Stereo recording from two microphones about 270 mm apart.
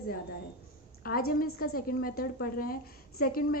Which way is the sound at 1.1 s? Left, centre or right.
Left.